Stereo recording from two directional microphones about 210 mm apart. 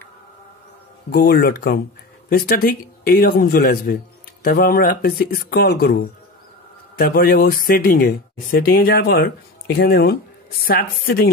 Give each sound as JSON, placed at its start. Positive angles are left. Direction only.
{"t": 1.1, "sound": "a man's voice", "side_deg": 45}